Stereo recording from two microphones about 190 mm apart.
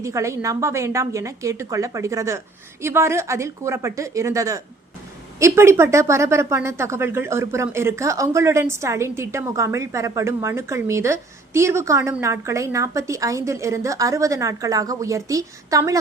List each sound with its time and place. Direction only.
0.0 s a woman's voice: 15° right (ahead or behind)